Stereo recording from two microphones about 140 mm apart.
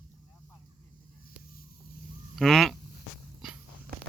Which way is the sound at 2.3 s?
Centre (ahead or behind).